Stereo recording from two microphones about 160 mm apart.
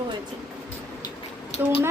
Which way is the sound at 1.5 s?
45° left (ahead or behind).